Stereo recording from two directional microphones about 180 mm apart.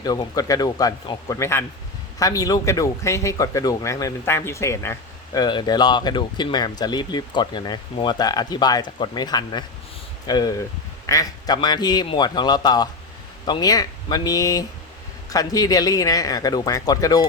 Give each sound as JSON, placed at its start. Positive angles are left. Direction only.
{"t": 0.0, "sound": "speech", "side_deg": 20}